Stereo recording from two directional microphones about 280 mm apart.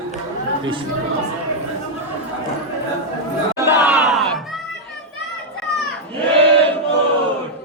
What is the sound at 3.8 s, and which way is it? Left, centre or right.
Crowd, centre.